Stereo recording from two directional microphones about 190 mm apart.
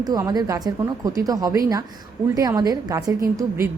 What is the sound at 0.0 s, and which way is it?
A woman's voice, 20° right (ahead or behind).